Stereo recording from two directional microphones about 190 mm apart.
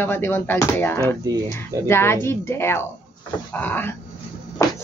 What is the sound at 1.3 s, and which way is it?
Speech, 20° right (ahead or behind).